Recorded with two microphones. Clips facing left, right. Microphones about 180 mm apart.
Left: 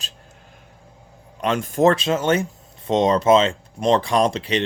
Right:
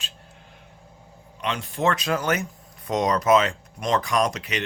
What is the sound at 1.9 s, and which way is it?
Speech, 25° left (ahead or behind).